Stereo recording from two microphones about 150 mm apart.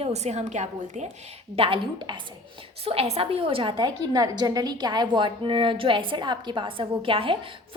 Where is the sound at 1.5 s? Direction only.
35° right (ahead or behind).